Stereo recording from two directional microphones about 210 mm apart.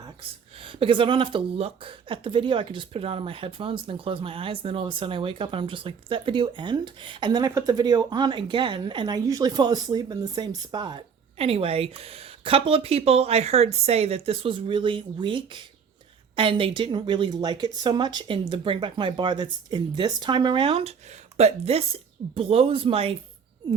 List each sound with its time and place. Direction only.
0.2 s speech: 25° right (ahead or behind)